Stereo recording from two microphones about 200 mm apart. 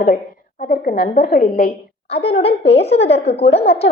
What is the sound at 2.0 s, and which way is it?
A woman's voice, 30° left (ahead or behind).